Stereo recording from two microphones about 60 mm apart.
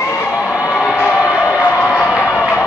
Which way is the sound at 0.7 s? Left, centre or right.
Centre.